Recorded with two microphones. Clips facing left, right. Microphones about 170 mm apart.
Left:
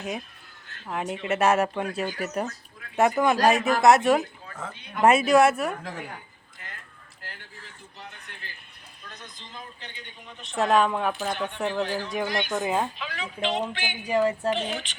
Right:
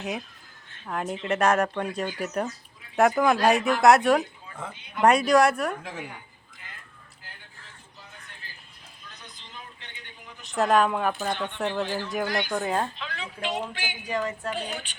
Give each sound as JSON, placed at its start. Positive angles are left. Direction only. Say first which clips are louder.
{"t": 0.0, "sound": "speech", "louder": "even", "side_deg": 0}
{"t": 7.2, "sound": "a sound", "louder": "left 7 dB", "side_deg": 75}
{"t": 10.2, "sound": "a sound", "louder": "left 1 dB", "side_deg": 25}
{"t": 10.6, "sound": "speech", "louder": "even", "side_deg": 0}
{"t": 11.8, "sound": "speech", "louder": "left 1 dB", "side_deg": 15}
{"t": 14.3, "sound": "speech", "louder": "left 6 dB", "side_deg": 30}